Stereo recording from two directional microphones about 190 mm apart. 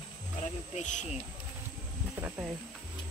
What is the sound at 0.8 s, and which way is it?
Speech, 40° left (ahead or behind).